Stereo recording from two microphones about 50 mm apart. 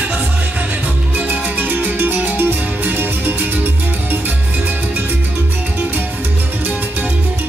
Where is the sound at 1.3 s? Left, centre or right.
Right.